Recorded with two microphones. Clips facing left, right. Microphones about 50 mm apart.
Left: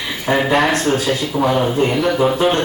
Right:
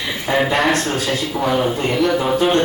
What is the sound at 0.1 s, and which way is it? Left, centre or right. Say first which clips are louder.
Speech: left 2 dB; centre.